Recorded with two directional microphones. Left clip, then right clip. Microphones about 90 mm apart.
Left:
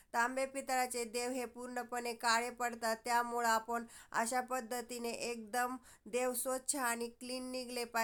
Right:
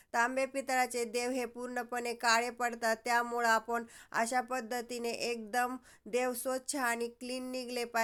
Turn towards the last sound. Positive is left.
turn(degrees=-20)  # may be behind; listen again after turning